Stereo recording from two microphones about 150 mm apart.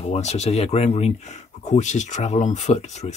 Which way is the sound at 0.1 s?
45° left (ahead or behind).